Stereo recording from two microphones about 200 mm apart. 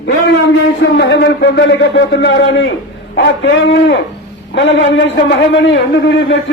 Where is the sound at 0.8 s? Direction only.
60° left (ahead or behind).